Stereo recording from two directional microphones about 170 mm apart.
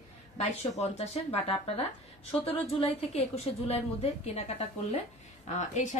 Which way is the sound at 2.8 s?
35° left (ahead or behind).